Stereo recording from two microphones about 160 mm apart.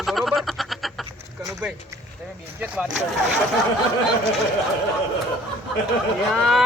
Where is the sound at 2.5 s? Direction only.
10° right (ahead or behind).